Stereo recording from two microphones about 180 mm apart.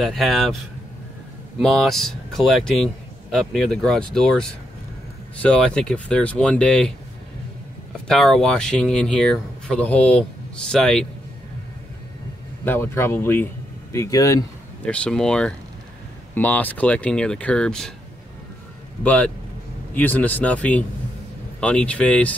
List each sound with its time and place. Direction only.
0.0 s speech: centre (ahead or behind)
1.6 s speech: centre (ahead or behind)
8.1 s speech: centre (ahead or behind)
12.6 s speech: 15° left (ahead or behind)
14.9 s speech: 5° left (ahead or behind)
19.0 s speech: 10° left (ahead or behind)